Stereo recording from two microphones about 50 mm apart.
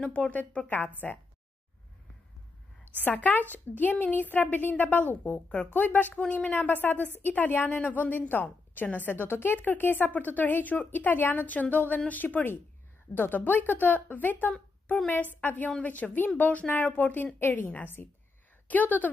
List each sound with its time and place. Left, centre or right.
0.0 s a woman's voice: left
3.0 s speech: left
3.4 s a woman's voice: right
3.8 s a woman's voice: left
9.1 s a woman's voice: left
17.4 s a woman's voice: left